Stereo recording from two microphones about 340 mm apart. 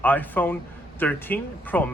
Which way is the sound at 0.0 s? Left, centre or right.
Centre.